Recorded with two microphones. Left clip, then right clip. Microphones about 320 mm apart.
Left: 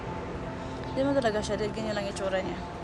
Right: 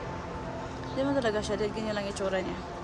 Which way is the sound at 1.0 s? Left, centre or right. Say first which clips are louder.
Left 2 dB; centre.